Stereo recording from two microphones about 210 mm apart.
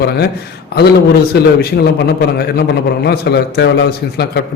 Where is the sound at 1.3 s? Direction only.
50° left (ahead or behind).